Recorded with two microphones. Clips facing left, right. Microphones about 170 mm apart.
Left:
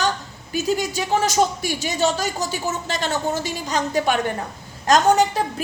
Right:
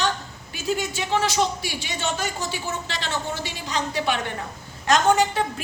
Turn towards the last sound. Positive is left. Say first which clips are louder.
# left 3 dB
turn(degrees=40)  # may be behind; listen again after turning